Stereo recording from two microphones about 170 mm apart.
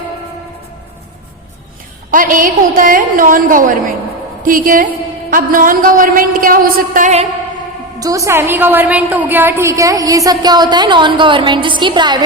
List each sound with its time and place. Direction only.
2.0 s a woman's voice: 55° right (ahead or behind)
7.9 s a woman's voice: 20° right (ahead or behind)